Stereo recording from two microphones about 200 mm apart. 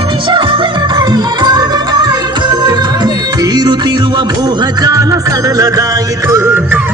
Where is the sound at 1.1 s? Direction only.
20° right (ahead or behind).